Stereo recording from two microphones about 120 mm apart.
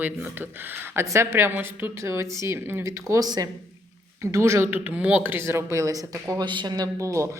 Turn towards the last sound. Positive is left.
turn(degrees=-25)  # may be behind; listen again after turning